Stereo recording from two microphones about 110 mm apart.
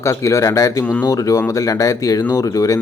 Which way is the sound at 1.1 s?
30° left (ahead or behind).